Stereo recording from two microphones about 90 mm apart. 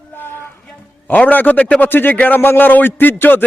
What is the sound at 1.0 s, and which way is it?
A man's voice, 20° left (ahead or behind).